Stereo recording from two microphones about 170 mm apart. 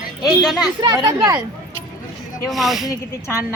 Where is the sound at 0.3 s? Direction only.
5° right (ahead or behind).